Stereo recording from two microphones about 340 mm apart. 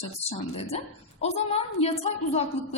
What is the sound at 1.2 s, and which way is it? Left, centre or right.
A woman's voice, centre.